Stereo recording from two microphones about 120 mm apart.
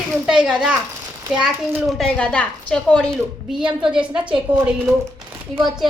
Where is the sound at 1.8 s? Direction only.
Centre (ahead or behind).